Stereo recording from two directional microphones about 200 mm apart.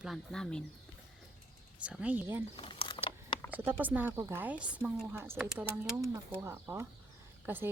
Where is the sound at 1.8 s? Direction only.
5° right (ahead or behind).